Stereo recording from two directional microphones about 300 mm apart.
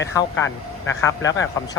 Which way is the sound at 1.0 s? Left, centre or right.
Centre.